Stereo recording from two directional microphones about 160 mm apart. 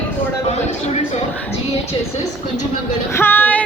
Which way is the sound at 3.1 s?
15° left (ahead or behind).